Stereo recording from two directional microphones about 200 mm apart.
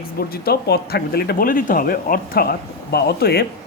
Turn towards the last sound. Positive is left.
turn(degrees=50)  # may be behind; listen again after turning